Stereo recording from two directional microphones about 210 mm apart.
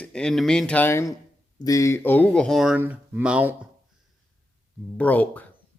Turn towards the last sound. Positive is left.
turn(degrees=10)  # may be behind; listen again after turning